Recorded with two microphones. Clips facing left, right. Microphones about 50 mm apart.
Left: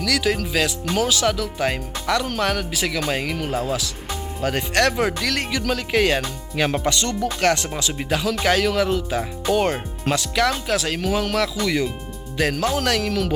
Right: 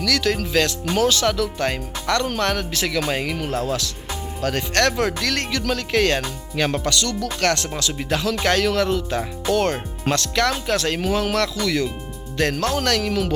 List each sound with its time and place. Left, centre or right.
0.0 s speech: centre
6.9 s speech: left
7.4 s speech: centre
11.6 s speech: centre